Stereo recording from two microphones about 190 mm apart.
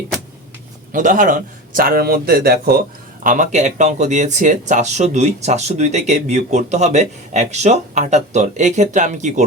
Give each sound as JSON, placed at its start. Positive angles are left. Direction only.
{"t": 0.9, "sound": "a man's voice", "side_deg": -45}
{"t": 3.2, "sound": "speech", "side_deg": -40}